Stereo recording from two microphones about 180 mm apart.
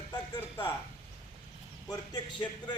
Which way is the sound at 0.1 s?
25° left (ahead or behind).